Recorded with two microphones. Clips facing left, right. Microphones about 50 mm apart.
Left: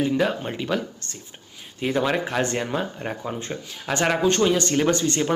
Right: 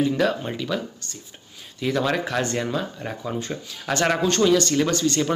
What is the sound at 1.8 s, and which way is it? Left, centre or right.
Speech, left.